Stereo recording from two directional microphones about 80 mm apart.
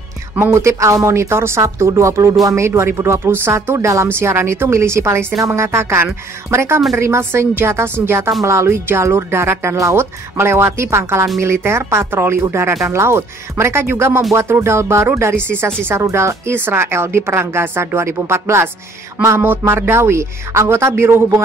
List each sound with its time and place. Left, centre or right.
0.4 s speech: right